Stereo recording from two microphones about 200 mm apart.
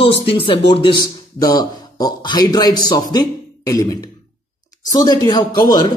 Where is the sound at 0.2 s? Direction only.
25° left (ahead or behind).